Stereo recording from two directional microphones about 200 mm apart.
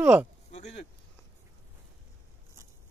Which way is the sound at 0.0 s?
5° right (ahead or behind).